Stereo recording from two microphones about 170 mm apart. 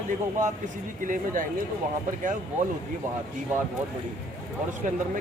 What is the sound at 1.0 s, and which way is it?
Speech, 50° right (ahead or behind).